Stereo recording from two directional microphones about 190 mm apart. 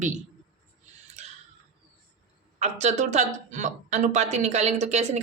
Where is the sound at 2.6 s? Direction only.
35° right (ahead or behind).